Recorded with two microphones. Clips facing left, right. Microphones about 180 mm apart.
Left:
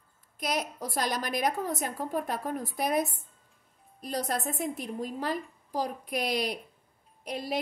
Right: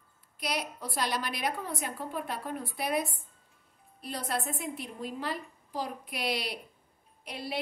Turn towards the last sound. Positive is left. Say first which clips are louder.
# left 4 dB
turn(degrees=45)  # may be behind; listen again after turning